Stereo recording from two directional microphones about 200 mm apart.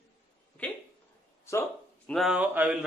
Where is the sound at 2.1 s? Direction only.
Centre (ahead or behind).